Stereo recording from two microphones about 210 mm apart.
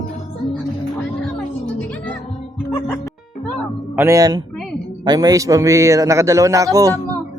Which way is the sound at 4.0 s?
15° right (ahead or behind).